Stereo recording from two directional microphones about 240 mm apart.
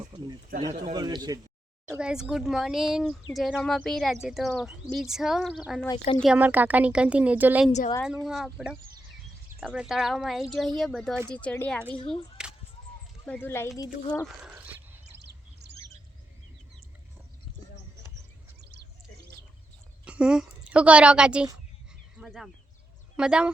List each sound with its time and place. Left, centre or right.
0.7 s a man's voice: right
0.9 s a man's voice: centre
1.9 s speech: centre
5.8 s speech: centre
6.1 s speech: centre
7.7 s a woman's voice: left
8.0 s speech: centre
11.9 s a woman's voice: left
13.2 s speech: centre
14.4 s dog: centre
20.1 s a woman's voice: centre